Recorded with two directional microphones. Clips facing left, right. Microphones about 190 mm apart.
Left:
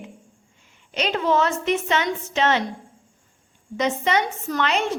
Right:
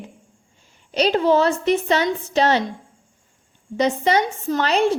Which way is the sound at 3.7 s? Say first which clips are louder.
Right 3 dB; 35° right (ahead or behind).